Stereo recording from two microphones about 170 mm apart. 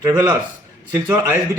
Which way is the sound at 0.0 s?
20° right (ahead or behind).